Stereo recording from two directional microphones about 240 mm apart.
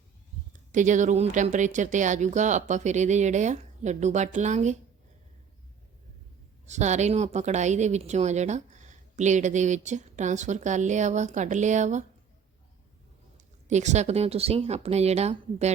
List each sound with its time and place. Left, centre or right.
0.5 s a woman's voice: right
6.7 s a woman's voice: right
13.3 s a woman's voice: right